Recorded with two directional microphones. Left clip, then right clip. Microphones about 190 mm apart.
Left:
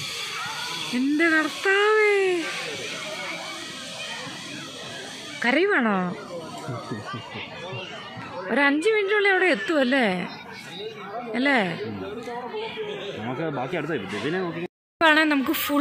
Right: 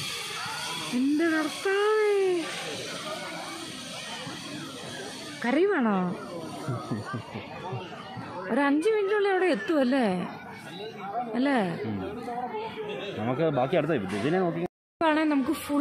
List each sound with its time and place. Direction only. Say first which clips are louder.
1.1 s a woman's voice: left 7 dB; 10° left (ahead or behind)
5.4 s a woman's voice: left 4 dB; 5° left (ahead or behind)
8.5 s a woman's voice: left 4 dB; centre (ahead or behind)
11.3 s a woman's voice: left 6 dB; centre (ahead or behind)
13.4 s speech: right 4 dB; 50° right (ahead or behind)
15.0 s a woman's voice: left 6 dB; 5° right (ahead or behind)